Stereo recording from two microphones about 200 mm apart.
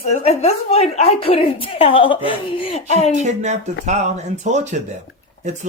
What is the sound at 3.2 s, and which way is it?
Speech, 35° right (ahead or behind).